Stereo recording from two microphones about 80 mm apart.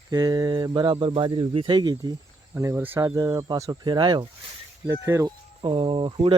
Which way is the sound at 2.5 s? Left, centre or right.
Right.